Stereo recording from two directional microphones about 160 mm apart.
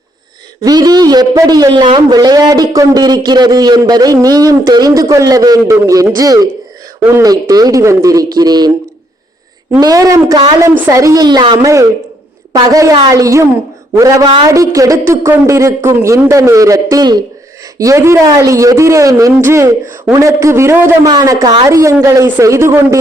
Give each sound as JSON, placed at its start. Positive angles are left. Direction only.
{"t": 0.6, "sound": "a man's voice", "side_deg": -25}
{"t": 9.8, "sound": "a man's voice", "side_deg": -20}